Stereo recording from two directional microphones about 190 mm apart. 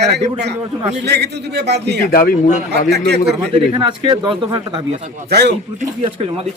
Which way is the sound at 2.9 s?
60° right (ahead or behind).